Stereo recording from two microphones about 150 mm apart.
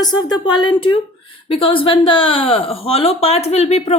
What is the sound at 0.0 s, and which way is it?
Speech, 25° left (ahead or behind).